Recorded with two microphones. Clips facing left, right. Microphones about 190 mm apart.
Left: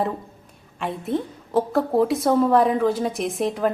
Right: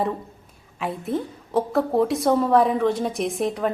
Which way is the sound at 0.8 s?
Centre (ahead or behind).